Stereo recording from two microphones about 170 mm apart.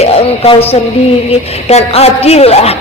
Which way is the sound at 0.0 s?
35° left (ahead or behind).